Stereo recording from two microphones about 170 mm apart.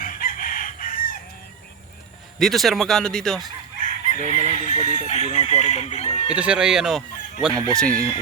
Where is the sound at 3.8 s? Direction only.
50° left (ahead or behind).